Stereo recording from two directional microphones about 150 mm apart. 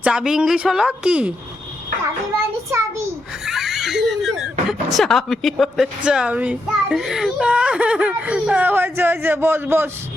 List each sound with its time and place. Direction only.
0.0 s a woman's voice: 5° right (ahead or behind)
2.6 s a sound: 20° right (ahead or behind)
3.4 s speech: centre (ahead or behind)